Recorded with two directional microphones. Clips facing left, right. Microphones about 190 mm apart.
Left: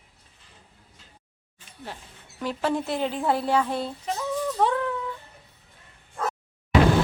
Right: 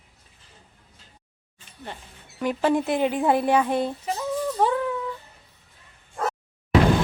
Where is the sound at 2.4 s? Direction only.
15° right (ahead or behind).